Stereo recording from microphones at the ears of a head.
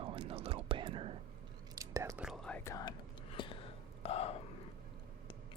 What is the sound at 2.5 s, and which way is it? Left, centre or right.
Whispering, left.